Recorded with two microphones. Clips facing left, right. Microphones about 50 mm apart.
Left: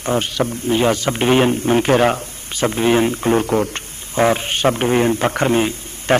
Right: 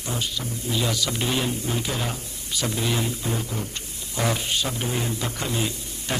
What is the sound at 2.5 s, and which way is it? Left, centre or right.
A man's voice, left.